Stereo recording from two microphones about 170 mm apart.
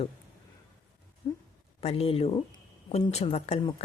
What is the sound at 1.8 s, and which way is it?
Speech, 35° left (ahead or behind).